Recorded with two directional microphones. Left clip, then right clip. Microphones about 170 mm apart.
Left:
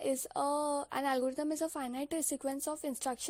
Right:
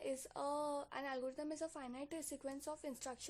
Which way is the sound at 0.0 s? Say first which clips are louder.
Left 10 dB; 45° left (ahead or behind).